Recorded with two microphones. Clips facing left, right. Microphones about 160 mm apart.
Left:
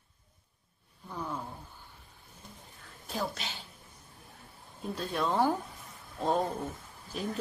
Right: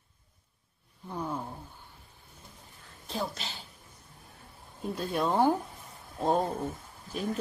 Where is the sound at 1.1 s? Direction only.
20° right (ahead or behind).